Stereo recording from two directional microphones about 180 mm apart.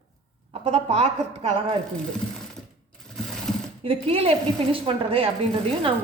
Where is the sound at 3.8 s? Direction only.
30° right (ahead or behind).